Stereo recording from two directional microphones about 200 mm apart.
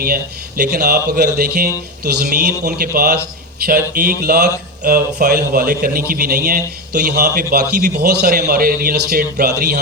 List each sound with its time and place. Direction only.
0.0 s a man's voice: 50° right (ahead or behind)